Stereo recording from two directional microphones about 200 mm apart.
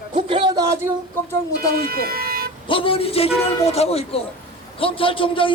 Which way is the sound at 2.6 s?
25° left (ahead or behind).